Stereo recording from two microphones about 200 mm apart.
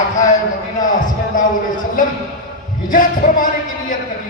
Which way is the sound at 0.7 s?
40° left (ahead or behind).